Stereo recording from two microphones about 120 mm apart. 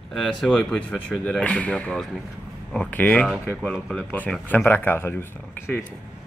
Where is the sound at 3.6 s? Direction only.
Centre (ahead or behind); by 5.8 s 20° left (ahead or behind).